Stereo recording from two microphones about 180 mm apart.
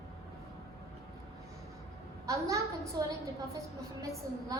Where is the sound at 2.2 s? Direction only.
15° right (ahead or behind).